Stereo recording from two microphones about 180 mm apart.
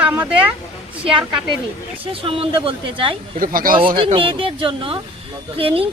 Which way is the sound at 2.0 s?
30° right (ahead or behind).